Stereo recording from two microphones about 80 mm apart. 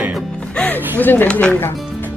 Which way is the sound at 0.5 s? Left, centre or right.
Centre.